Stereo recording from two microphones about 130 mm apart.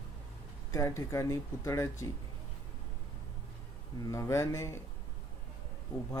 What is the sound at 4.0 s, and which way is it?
Speech, 25° left (ahead or behind).